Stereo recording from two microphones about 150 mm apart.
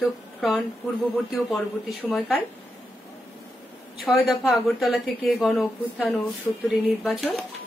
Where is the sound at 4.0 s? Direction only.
Centre (ahead or behind).